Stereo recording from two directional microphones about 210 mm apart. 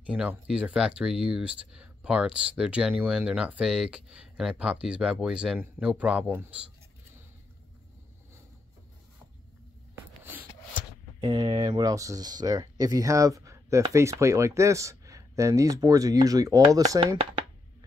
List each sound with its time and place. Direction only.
0.1 s speech: 5° right (ahead or behind)
9.9 s a sound: 10° right (ahead or behind)
11.1 s speech: 20° right (ahead or behind)